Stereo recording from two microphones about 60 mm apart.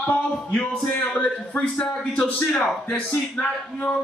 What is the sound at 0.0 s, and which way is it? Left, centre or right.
Speech, left.